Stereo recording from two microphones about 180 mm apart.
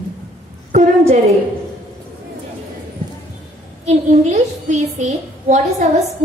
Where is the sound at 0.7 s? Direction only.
40° right (ahead or behind).